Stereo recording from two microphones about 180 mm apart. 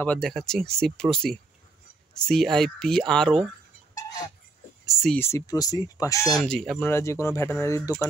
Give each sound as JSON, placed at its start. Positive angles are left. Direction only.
{"t": 0.0, "sound": "speech", "side_deg": 5}
{"t": 4.8, "sound": "speech", "side_deg": 0}
{"t": 5.2, "sound": "speech", "side_deg": 15}
{"t": 6.4, "sound": "speech", "side_deg": 5}